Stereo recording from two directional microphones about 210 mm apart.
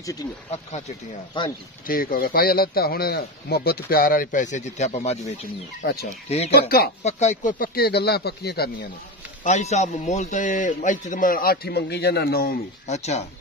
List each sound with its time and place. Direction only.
0.5 s speech: 30° left (ahead or behind)
1.9 s a man's voice: 45° left (ahead or behind)
6.3 s a man's voice: 30° left (ahead or behind); by 8.7 s 50° left (ahead or behind)
9.4 s speech: 30° left (ahead or behind)
12.8 s speech: 30° left (ahead or behind)